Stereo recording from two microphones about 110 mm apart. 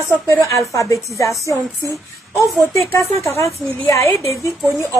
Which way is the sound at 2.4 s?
Centre (ahead or behind).